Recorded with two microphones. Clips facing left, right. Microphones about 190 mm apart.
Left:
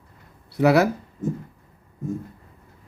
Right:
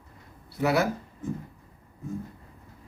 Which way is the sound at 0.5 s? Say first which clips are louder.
Left 7 dB; 65° left (ahead or behind).